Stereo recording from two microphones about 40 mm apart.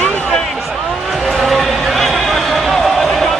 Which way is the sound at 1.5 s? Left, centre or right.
Centre.